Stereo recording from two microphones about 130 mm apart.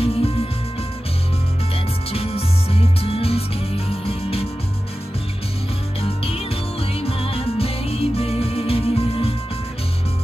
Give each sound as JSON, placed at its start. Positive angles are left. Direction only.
{"t": 0.0, "sound": "music", "side_deg": 45}
{"t": 2.0, "sound": "music", "side_deg": 50}
{"t": 5.9, "sound": "music", "side_deg": 50}